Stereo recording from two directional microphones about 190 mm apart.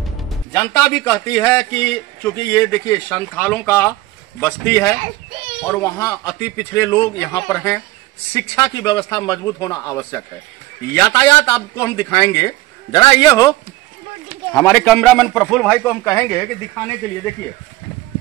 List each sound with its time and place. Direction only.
0.5 s a man's voice: 10° left (ahead or behind)